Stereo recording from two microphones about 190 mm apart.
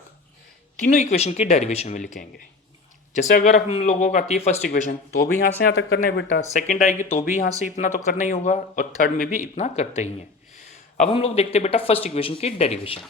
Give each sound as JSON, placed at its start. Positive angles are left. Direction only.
{"t": 0.9, "sound": "speech", "side_deg": 40}
{"t": 6.4, "sound": "speech", "side_deg": 40}